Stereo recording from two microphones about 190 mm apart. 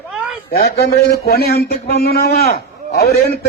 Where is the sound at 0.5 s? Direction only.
60° left (ahead or behind).